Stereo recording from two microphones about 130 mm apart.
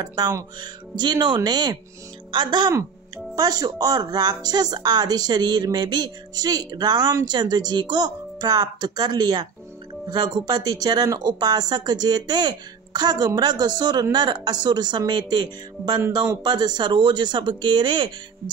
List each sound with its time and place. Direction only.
0.0 s speech: 30° right (ahead or behind)